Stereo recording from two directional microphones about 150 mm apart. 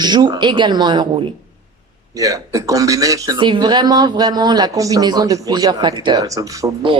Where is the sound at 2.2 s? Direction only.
25° right (ahead or behind).